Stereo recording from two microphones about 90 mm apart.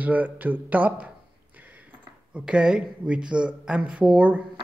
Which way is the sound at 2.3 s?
10° right (ahead or behind).